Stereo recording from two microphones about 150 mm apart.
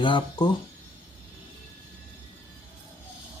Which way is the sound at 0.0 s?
35° left (ahead or behind).